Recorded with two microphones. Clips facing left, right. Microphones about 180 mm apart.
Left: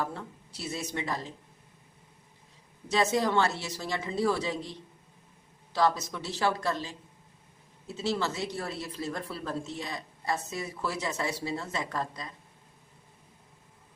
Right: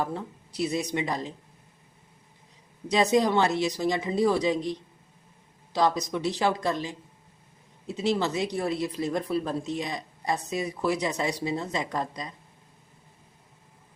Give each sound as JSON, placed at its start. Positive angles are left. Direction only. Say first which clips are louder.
{"t": 0.0, "sound": "speech", "louder": "right 4 dB", "side_deg": -15}
{"t": 2.9, "sound": "speech", "louder": "right 4 dB", "side_deg": -15}